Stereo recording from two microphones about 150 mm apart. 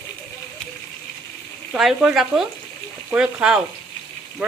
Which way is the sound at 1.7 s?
5° right (ahead or behind).